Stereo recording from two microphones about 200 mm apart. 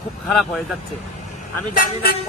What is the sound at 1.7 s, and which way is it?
Speech, 45° left (ahead or behind).